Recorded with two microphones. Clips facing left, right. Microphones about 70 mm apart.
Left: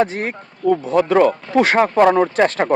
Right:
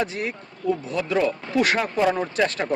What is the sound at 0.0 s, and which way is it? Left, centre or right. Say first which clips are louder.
Speech: left 7 dB; left.